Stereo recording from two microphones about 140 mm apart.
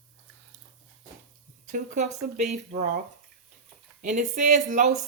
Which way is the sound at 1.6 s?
65° right (ahead or behind).